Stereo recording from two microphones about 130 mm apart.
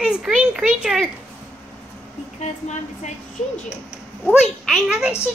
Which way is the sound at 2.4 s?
65° left (ahead or behind).